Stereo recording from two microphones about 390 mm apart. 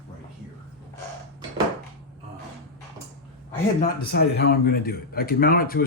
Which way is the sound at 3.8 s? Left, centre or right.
Left.